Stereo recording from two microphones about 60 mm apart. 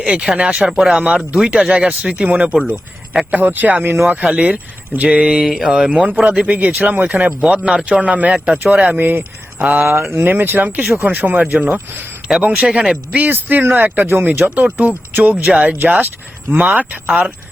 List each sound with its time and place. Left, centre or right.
0.0 s speech: centre
0.7 s speech: centre
1.0 s speech: centre
2.0 s speech: centre
7.3 s speech: centre
11.9 s speech: right
12.5 s speech: centre
13.1 s speech: right